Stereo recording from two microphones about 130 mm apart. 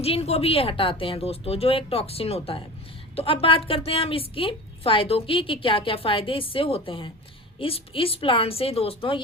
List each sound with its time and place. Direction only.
0.0 s a woman's voice: 50° left (ahead or behind)